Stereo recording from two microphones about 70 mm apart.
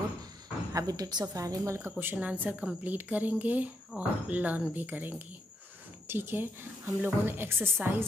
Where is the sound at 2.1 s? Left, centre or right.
Right.